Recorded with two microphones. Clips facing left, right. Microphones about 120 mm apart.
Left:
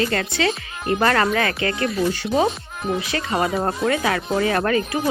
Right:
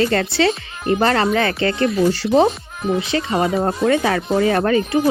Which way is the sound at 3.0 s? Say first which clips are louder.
Right 5 dB; 25° right (ahead or behind).